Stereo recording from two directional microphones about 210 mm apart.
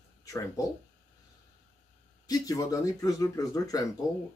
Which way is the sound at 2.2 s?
15° left (ahead or behind).